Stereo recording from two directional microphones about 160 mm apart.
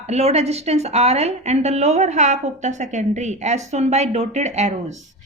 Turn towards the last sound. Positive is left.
turn(degrees=-45)  # may be behind; listen again after turning